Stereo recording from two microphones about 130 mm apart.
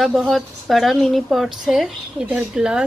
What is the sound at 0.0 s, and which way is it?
A woman's voice, 5° right (ahead or behind).